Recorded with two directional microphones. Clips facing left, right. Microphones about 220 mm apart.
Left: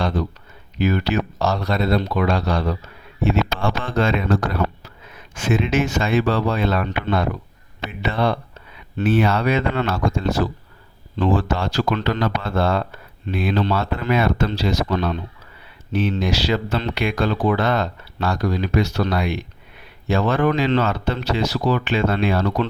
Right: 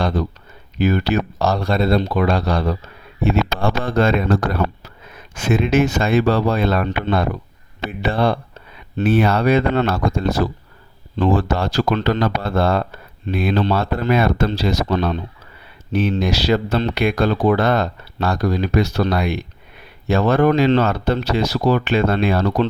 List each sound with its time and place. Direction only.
0.8 s speech: 35° right (ahead or behind)
3.8 s speech: 40° right (ahead or behind)